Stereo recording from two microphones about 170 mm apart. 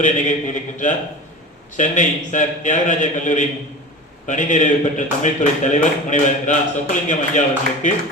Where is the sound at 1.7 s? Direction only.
45° left (ahead or behind).